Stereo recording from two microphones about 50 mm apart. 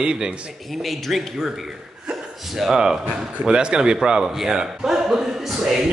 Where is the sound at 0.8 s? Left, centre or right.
Centre.